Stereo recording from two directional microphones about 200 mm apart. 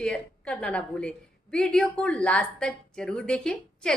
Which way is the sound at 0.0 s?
5° left (ahead or behind).